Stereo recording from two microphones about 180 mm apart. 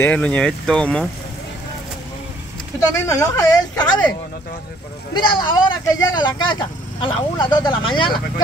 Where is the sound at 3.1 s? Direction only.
15° left (ahead or behind).